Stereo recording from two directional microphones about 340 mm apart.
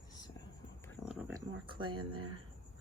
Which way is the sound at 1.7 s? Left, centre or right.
Centre.